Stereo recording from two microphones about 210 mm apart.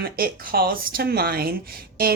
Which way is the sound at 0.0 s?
45° right (ahead or behind).